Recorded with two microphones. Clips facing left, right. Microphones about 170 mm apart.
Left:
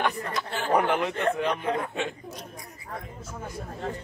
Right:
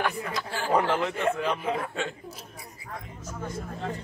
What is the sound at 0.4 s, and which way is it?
Speech, 20° left (ahead or behind).